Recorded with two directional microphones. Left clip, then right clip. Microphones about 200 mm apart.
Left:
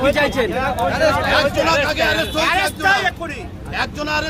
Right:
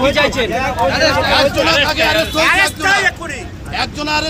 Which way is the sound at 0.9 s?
50° left (ahead or behind).